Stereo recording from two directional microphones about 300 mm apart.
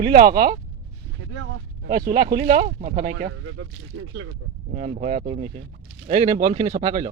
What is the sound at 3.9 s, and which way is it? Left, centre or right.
Speech, right.